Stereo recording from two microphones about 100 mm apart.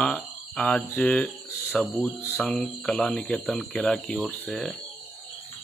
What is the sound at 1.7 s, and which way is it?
Speech, 5° left (ahead or behind).